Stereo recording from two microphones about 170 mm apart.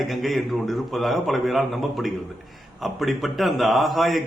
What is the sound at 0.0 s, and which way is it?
A man's voice, centre (ahead or behind).